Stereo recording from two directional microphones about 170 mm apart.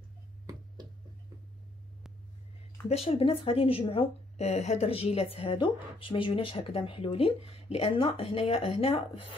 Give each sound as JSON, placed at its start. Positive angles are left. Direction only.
{"t": 2.9, "sound": "a woman's voice", "side_deg": 35}